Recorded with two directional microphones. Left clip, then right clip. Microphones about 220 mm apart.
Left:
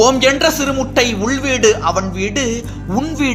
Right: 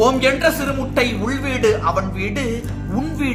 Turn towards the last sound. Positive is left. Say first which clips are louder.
# left 5 dB
turn(degrees=35)  # may be behind; listen again after turning